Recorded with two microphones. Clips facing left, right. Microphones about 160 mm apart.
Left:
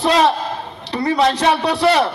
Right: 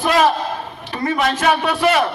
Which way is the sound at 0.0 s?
30° left (ahead or behind).